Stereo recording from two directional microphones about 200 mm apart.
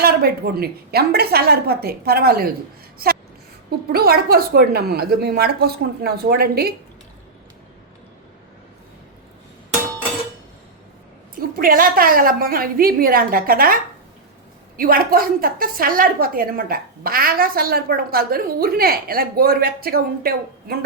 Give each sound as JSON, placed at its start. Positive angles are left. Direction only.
{"t": 0.0, "sound": "a woman's voice", "side_deg": -50}
{"t": 11.3, "sound": "a woman's voice", "side_deg": -45}
{"t": 14.8, "sound": "a woman's voice", "side_deg": -45}